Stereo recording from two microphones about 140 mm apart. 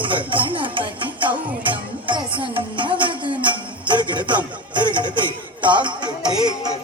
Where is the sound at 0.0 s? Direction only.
35° right (ahead or behind).